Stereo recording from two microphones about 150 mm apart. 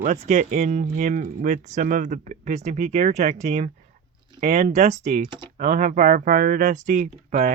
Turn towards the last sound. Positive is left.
turn(degrees=-50)  # may be behind; listen again after turning